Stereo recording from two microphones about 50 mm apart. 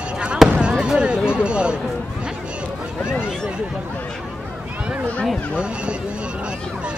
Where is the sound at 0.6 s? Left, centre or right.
Centre.